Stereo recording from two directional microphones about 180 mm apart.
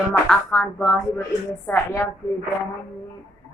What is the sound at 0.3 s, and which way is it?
A woman's voice, 5° left (ahead or behind).